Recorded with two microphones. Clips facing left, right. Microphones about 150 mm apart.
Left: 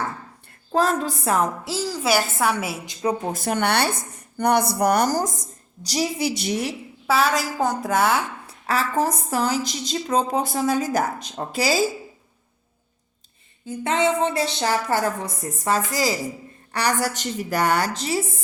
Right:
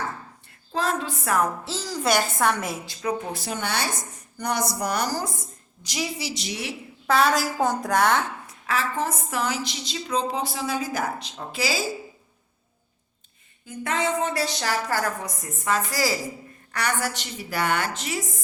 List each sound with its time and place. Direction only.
0.7 s a woman's voice: 45° left (ahead or behind); by 1.5 s 25° left (ahead or behind)
1.6 s a woman's voice: 10° left (ahead or behind)
2.8 s a woman's voice: 25° left (ahead or behind)
3.3 s speech: 60° left (ahead or behind); by 6.1 s 40° left (ahead or behind)
6.1 s a woman's voice: 55° left (ahead or behind)
7.1 s a woman's voice: centre (ahead or behind)
8.4 s a woman's voice: 35° left (ahead or behind)
13.7 s a woman's voice: 25° left (ahead or behind)
15.5 s a woman's voice: 35° left (ahead or behind)
15.9 s a woman's voice: 20° left (ahead or behind)
16.7 s a woman's voice: 35° left (ahead or behind)